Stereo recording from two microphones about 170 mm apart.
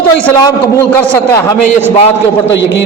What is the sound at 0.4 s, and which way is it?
Speech, 20° left (ahead or behind).